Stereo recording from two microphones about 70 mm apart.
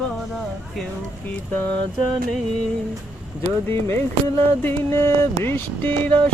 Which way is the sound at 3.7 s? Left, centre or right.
Left.